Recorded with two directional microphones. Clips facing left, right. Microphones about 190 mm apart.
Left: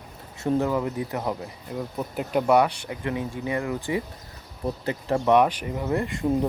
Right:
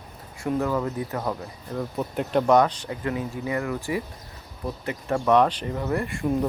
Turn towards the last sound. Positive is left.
turn(degrees=20)  # may be behind; listen again after turning